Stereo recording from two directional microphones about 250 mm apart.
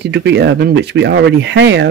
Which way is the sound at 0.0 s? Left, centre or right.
Right.